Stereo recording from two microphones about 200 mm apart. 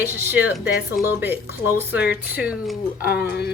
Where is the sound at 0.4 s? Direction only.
65° left (ahead or behind).